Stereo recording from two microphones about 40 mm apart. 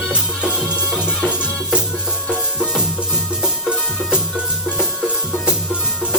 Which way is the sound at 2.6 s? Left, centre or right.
Centre.